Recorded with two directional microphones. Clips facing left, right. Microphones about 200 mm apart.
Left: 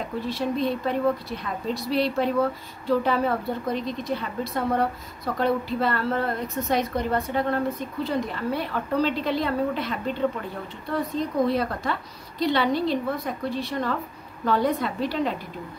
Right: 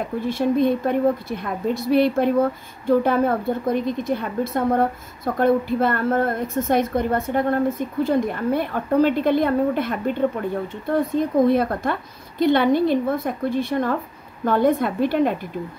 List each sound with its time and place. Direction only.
0.2 s a woman's voice: 50° right (ahead or behind)